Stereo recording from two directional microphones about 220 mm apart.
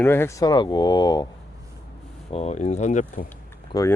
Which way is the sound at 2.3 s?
30° left (ahead or behind).